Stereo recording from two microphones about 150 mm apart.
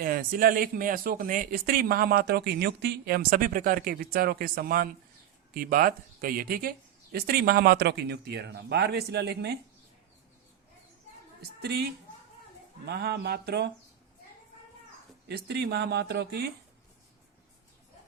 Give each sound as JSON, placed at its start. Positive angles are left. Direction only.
{"t": 0.0, "sound": "speech", "side_deg": -75}
{"t": 11.6, "sound": "speech", "side_deg": -90}
{"t": 15.3, "sound": "speech", "side_deg": -90}